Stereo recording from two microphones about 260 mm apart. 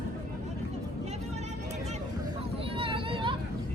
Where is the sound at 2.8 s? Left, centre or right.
Centre.